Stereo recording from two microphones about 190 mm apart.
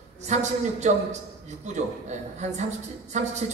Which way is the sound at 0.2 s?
35° right (ahead or behind).